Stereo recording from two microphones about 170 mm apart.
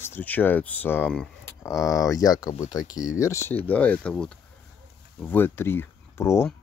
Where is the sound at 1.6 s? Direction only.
20° left (ahead or behind).